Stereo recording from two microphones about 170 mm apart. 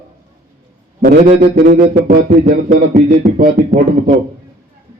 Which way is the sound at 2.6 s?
45° right (ahead or behind).